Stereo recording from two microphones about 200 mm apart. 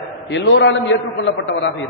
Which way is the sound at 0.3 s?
65° left (ahead or behind).